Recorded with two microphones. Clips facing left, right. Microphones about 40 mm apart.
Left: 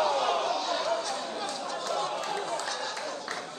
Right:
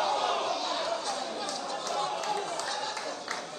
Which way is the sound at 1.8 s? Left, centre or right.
Left.